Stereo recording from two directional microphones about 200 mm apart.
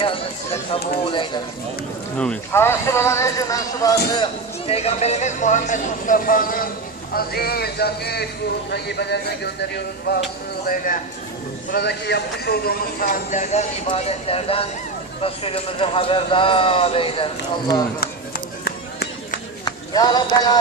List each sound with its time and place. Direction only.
0.0 s a man's voice: 25° left (ahead or behind)
2.1 s a man's voice: 5° left (ahead or behind); by 10.2 s 55° left (ahead or behind)
10.7 s a man's voice: 45° left (ahead or behind)
11.7 s a man's voice: 55° left (ahead or behind); by 17.8 s 25° left (ahead or behind)
18.0 s run: 50° left (ahead or behind)
19.6 s speech: 20° left (ahead or behind)